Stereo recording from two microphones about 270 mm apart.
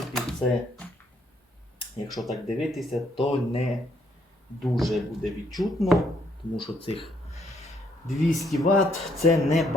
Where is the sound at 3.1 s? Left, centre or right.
Left.